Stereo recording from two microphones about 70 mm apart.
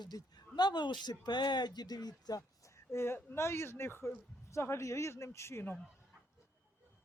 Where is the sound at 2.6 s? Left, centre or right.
Left.